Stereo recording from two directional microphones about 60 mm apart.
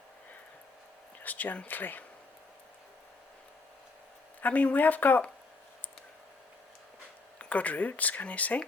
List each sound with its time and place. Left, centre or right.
1.2 s speech: left
4.4 s speech: left
7.3 s speech: left